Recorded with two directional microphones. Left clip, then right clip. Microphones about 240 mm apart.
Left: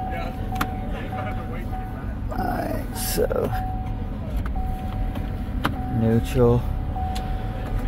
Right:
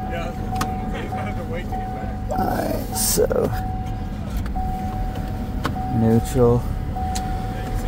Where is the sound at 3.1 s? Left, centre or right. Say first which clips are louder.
Right 3 dB; centre.